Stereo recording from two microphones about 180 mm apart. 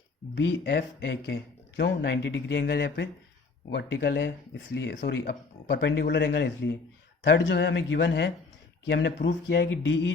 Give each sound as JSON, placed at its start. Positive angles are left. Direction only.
{"t": 0.3, "sound": "speech", "side_deg": 75}